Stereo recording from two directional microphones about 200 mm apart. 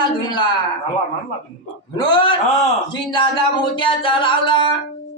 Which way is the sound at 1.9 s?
25° left (ahead or behind).